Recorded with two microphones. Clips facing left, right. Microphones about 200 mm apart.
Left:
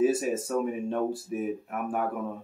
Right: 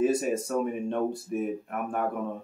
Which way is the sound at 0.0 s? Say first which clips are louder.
Even; 5° left (ahead or behind).